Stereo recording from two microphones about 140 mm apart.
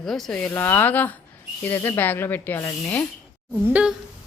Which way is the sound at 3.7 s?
10° right (ahead or behind).